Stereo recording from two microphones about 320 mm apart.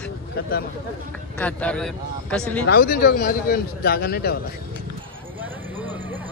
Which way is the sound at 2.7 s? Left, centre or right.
Left.